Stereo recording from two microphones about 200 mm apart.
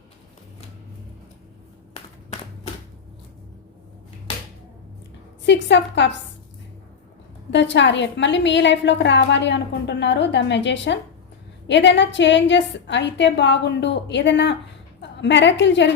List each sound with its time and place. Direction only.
5.4 s a woman's voice: 60° left (ahead or behind)
7.5 s a woman's voice: 60° left (ahead or behind)